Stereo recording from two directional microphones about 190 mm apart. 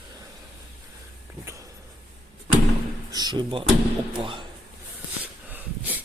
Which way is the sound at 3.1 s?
25° right (ahead or behind).